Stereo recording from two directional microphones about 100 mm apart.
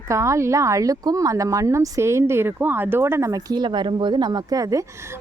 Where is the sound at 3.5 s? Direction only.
50° right (ahead or behind); by 4.9 s 35° right (ahead or behind).